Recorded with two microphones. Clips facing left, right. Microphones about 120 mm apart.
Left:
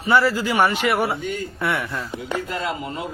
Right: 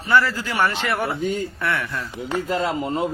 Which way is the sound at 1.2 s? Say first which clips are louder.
Right 4 dB; 35° right (ahead or behind).